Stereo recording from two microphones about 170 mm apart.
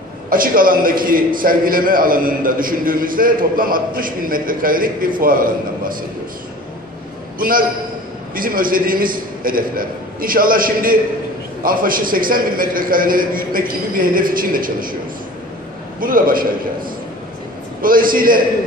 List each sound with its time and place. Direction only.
0.3 s a man's voice: 55° right (ahead or behind)
7.3 s a man's voice: 55° right (ahead or behind)
16.0 s a man's voice: 55° right (ahead or behind)
17.8 s a man's voice: 55° right (ahead or behind)